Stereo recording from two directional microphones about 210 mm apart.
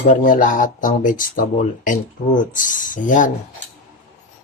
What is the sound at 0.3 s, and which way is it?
Speech, 40° left (ahead or behind).